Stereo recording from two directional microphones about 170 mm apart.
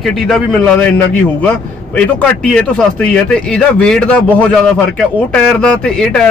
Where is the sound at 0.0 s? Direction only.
Centre (ahead or behind).